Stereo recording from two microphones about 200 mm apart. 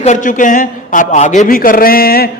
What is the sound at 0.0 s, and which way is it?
A man's voice, 40° left (ahead or behind).